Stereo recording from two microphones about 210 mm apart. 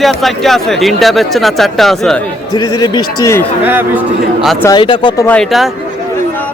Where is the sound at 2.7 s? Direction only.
20° left (ahead or behind).